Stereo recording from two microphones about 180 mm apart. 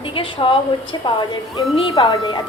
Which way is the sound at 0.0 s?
30° left (ahead or behind).